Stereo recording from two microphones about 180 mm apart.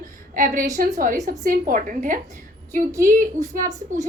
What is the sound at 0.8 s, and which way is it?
A woman's voice, 55° right (ahead or behind).